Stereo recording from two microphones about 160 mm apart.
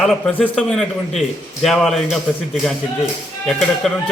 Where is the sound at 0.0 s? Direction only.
Centre (ahead or behind).